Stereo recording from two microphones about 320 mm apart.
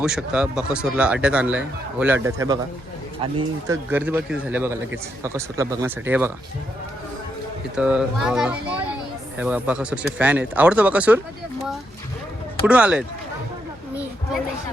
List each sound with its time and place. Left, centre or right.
0.0 s speech: centre
3.8 s speech: centre
7.8 s speech: centre
12.6 s speech: centre